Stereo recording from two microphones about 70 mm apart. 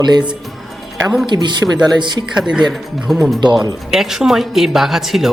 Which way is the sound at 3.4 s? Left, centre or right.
Right.